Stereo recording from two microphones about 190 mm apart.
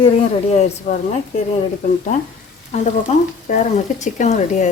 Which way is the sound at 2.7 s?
35° left (ahead or behind).